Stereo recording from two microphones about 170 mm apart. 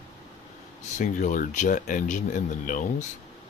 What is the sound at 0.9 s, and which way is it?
Speech, 50° left (ahead or behind).